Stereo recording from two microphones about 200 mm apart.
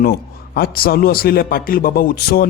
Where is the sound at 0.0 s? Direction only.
50° left (ahead or behind).